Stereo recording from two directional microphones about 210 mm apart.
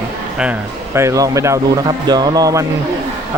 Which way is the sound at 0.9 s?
15° right (ahead or behind).